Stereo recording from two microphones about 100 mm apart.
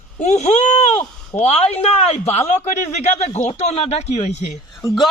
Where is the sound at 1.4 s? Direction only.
90° left.